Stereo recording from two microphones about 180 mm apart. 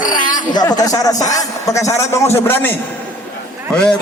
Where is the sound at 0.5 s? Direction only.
20° left (ahead or behind).